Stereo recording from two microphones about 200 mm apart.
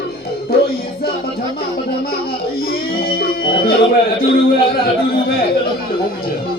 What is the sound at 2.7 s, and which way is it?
Baby cry, 50° left (ahead or behind).